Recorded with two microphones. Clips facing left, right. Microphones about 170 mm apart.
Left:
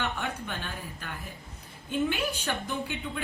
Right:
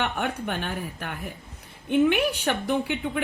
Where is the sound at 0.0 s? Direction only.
60° right (ahead or behind).